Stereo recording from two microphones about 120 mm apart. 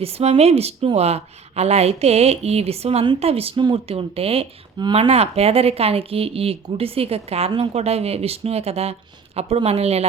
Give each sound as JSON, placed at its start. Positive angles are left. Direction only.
{"t": 0.0, "sound": "speech", "side_deg": -60}